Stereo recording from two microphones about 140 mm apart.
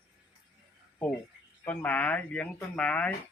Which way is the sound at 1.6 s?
10° left (ahead or behind).